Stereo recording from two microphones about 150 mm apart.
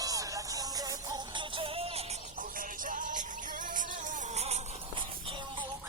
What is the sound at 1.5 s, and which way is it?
Music, 40° right (ahead or behind).